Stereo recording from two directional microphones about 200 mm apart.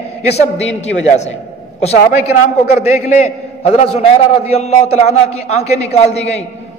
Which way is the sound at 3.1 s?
35° left (ahead or behind).